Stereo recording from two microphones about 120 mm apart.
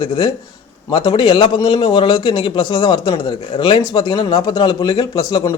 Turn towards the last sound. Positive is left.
turn(degrees=35)  # may be behind; listen again after turning